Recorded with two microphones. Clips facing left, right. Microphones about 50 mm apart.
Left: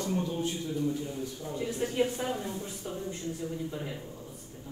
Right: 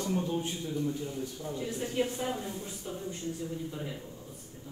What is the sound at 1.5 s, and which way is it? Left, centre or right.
Speech, left.